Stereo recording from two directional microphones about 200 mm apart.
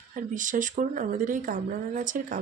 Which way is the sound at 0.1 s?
40° right (ahead or behind).